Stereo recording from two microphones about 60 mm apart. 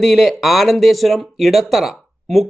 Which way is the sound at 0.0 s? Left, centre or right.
Centre.